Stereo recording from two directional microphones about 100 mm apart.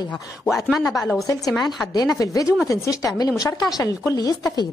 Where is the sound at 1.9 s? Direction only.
40° left (ahead or behind).